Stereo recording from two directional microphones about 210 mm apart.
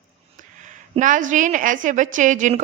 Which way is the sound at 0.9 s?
40° right (ahead or behind).